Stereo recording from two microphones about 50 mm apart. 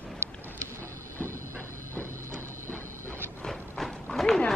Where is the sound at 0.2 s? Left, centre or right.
Right.